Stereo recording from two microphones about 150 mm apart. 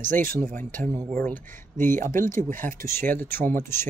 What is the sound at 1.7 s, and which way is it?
Speech, 60° right (ahead or behind).